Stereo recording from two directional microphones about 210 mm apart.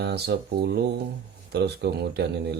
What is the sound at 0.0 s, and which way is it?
Speech, 50° right (ahead or behind).